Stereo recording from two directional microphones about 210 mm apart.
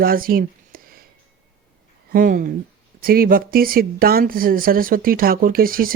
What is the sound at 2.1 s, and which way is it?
Speech, 40° right (ahead or behind).